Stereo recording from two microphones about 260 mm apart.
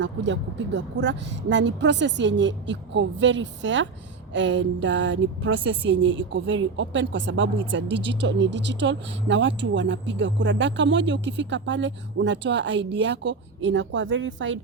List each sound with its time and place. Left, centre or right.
0.0 s speech: right